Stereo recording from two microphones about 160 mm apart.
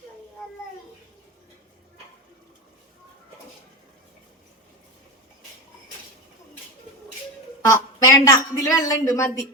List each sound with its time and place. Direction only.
7.6 s a woman's voice: 20° left (ahead or behind)